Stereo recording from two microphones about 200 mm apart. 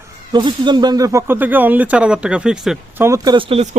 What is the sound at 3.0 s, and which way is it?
Speech, 15° right (ahead or behind).